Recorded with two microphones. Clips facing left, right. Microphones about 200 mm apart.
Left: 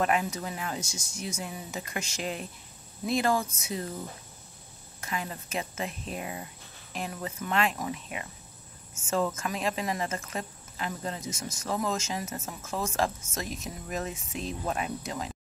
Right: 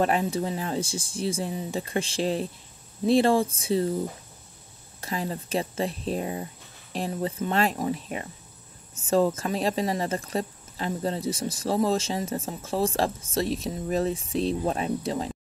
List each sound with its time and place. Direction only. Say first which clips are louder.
0.0 s speech: right 4 dB; 30° right (ahead or behind)
5.0 s speech: right 5 dB; 35° right (ahead or behind)